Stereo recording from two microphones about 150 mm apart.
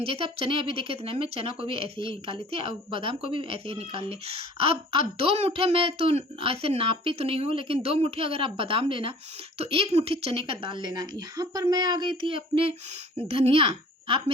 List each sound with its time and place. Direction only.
0.0 s speech: 40° right (ahead or behind)